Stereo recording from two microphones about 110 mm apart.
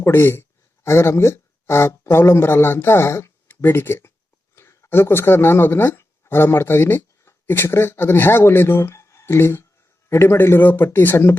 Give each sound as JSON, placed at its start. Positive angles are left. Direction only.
{"t": 0.0, "sound": "speech", "side_deg": 20}